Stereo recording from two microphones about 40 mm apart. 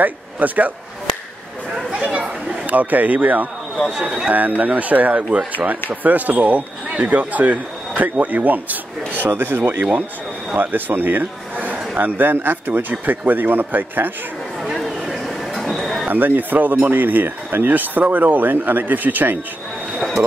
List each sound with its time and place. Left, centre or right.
0.0 s a man's voice: right
1.9 s chatter: right
2.6 s a man's voice: right
3.9 s speech: right
4.3 s a man's voice: right
9.3 s speech: right
10.5 s a man's voice: right
15.2 s a sound: centre
16.1 s a man's voice: right